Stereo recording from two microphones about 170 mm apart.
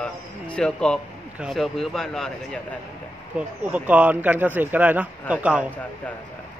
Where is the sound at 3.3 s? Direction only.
10° right (ahead or behind).